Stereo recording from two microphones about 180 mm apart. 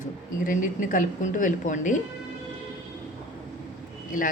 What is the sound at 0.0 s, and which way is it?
Speech, 45° left (ahead or behind).